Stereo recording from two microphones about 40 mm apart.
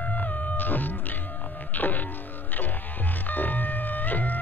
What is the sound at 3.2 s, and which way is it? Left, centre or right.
Music, left.